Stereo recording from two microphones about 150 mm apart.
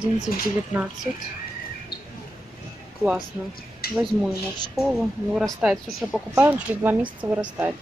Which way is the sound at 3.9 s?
Centre (ahead or behind).